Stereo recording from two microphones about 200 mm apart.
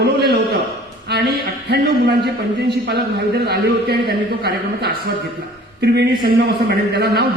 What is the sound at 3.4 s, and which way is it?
Speech, 55° right (ahead or behind).